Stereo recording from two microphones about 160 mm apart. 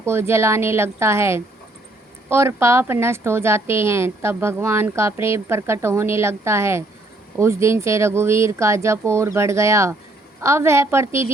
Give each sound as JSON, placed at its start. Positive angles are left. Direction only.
{"t": 0.0, "sound": "a woman's voice", "side_deg": -15}